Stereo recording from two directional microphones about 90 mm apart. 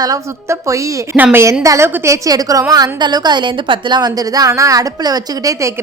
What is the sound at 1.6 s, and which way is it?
A woman's voice, 35° right (ahead or behind).